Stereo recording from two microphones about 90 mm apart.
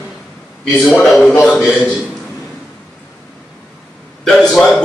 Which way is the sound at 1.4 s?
5° right (ahead or behind).